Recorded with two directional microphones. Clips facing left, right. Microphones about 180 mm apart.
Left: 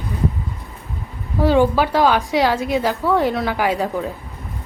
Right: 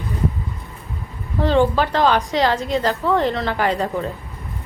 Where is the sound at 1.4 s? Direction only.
10° left (ahead or behind).